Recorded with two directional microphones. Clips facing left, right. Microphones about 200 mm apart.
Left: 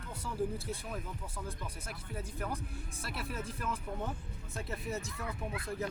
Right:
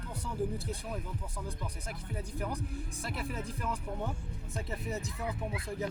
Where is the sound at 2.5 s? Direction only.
15° right (ahead or behind).